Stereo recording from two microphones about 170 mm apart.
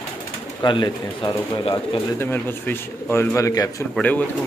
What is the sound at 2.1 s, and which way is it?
Speech, 10° left (ahead or behind).